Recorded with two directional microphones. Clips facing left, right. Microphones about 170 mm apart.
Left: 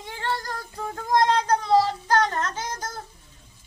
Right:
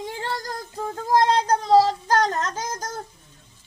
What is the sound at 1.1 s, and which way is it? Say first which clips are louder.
Child singing: right 1 dB; 35° right (ahead or behind).